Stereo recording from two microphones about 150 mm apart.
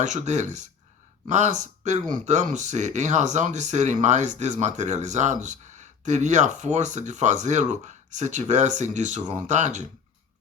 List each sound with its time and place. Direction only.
0.0 s speech: 55° right (ahead or behind)